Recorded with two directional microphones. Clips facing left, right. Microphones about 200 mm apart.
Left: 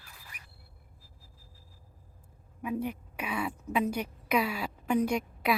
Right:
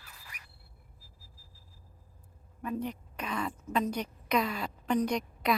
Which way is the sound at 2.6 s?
10° left (ahead or behind).